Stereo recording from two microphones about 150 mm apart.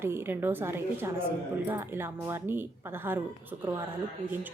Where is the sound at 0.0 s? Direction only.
15° right (ahead or behind).